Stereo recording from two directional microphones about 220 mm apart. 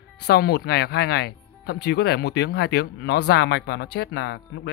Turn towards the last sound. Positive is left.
turn(degrees=50)  # may be behind; listen again after turning